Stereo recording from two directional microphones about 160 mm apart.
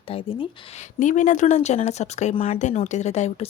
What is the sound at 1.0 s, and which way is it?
Speech, 50° left (ahead or behind).